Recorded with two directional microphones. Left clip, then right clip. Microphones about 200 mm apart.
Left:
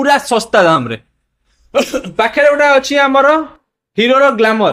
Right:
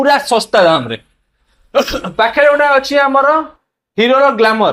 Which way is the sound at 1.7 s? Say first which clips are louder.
Even; 15° left (ahead or behind).